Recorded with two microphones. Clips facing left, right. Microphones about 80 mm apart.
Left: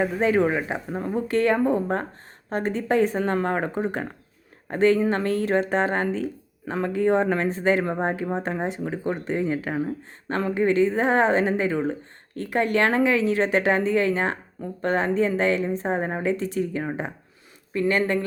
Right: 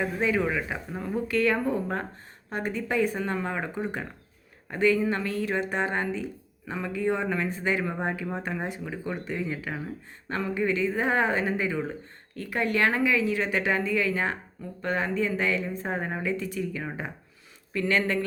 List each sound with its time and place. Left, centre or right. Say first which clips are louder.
0.0 s speech: left 5 dB; left
8.3 s speech: left 5 dB; left
11.0 s speech: left 5 dB; left
11.3 s speech: left 5 dB; left
15.0 s speech: left 6 dB; left
15.3 s speech: left 5 dB; left
15.7 s speech: left 6 dB; left
17.7 s speech: left 3 dB; left